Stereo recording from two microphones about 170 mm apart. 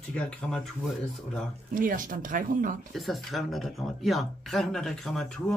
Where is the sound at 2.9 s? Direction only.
Centre (ahead or behind).